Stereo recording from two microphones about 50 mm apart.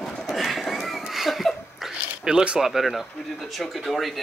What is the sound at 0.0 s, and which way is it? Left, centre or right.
Horse, centre.